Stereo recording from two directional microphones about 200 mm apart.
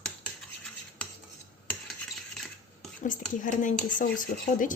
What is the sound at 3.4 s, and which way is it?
Speech, 40° left (ahead or behind).